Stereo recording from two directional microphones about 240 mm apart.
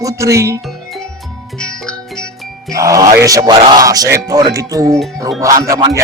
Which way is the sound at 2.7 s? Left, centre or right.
Centre.